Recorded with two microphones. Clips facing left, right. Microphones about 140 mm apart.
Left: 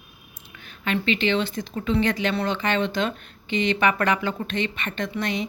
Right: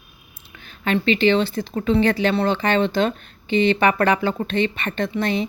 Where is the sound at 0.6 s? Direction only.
35° right (ahead or behind).